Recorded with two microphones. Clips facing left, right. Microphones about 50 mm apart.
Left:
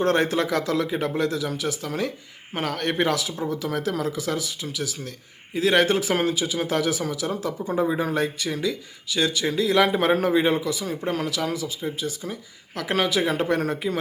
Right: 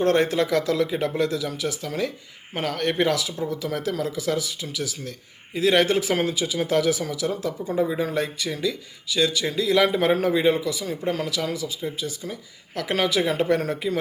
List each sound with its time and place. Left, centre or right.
0.0 s speech: centre
4.2 s speech: centre